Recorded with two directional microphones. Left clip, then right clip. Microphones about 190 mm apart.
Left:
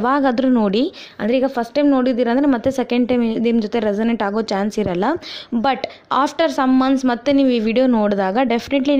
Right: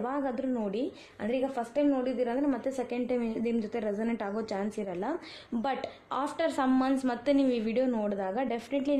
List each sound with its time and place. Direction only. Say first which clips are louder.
0.0 s a woman's voice: left 16 dB; 40° left (ahead or behind)